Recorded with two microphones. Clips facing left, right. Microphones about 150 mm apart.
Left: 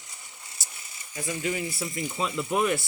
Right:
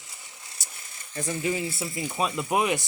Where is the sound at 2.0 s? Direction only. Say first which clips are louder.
Right 2 dB; 20° right (ahead or behind).